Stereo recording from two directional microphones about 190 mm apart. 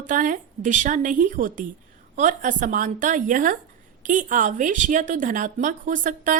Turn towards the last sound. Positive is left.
turn(degrees=-45)  # may be behind; listen again after turning